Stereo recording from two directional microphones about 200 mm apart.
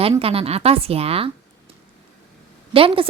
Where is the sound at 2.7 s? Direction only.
25° right (ahead or behind).